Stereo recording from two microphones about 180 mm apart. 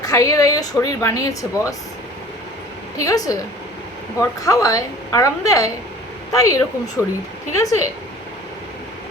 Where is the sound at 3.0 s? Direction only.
20° left (ahead or behind).